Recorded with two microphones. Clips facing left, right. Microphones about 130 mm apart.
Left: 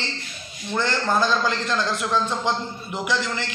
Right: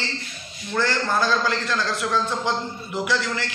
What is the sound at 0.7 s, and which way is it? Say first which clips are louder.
A man's voice: even; 20° left (ahead or behind).